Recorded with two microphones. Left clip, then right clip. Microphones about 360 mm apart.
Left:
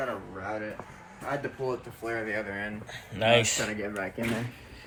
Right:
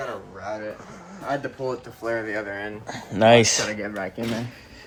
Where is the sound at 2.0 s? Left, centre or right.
Right.